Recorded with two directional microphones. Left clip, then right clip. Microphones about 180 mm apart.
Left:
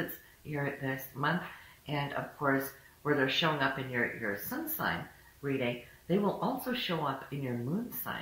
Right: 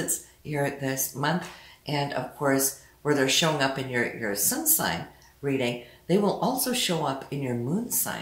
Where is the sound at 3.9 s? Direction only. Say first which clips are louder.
Right 5 dB; 35° right (ahead or behind).